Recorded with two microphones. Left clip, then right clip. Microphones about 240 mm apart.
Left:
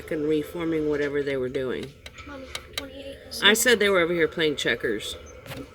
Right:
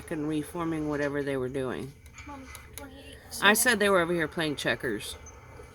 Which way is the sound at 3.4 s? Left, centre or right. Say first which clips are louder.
Left 4 dB; right.